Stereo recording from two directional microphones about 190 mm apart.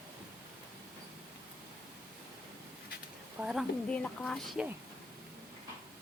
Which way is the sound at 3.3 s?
5° right (ahead or behind).